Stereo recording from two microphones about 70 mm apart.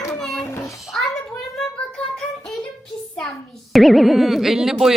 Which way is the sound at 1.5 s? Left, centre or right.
Centre.